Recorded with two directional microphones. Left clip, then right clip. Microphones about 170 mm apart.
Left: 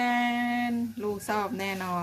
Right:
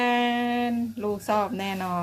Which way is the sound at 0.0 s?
30° right (ahead or behind).